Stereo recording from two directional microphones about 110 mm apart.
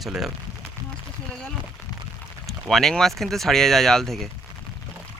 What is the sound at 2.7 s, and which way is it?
Speech, centre (ahead or behind).